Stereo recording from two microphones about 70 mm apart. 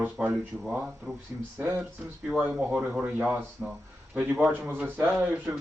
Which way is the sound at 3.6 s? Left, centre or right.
Centre.